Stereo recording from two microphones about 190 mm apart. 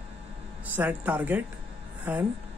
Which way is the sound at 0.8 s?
10° right (ahead or behind).